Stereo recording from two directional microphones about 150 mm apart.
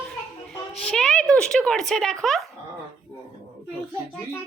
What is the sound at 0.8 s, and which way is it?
Speech, 5° left (ahead or behind).